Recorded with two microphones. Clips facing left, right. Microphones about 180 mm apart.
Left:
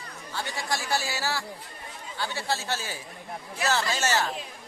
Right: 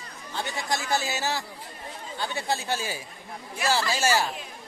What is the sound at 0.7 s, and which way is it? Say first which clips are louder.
Speech: right 2 dB; 20° right (ahead or behind).